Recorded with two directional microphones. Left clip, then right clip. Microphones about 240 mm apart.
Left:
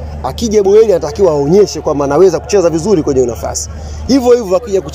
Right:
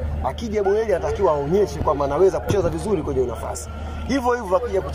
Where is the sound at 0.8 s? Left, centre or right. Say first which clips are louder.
Left 9 dB; left.